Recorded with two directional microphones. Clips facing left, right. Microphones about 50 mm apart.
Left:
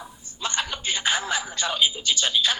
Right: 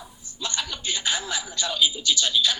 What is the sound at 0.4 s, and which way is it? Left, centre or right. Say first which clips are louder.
A man's voice: left 3 dB; left.